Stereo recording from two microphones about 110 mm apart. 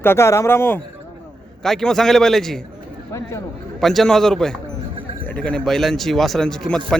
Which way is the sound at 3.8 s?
Centre (ahead or behind).